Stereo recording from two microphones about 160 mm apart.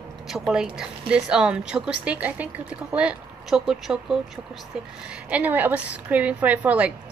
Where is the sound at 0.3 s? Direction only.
5° right (ahead or behind).